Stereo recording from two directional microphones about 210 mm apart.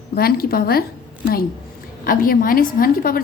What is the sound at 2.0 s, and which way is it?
A woman's voice, 40° left (ahead or behind).